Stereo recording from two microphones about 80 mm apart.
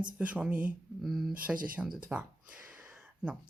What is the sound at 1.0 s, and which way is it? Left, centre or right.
Speech, centre.